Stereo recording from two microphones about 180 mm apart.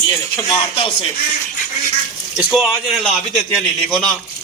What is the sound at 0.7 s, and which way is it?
Speech, 30° left (ahead or behind).